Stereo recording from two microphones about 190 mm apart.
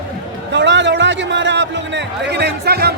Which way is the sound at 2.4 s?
55° right (ahead or behind).